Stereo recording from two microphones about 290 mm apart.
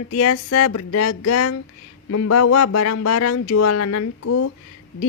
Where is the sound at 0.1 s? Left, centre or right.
Left.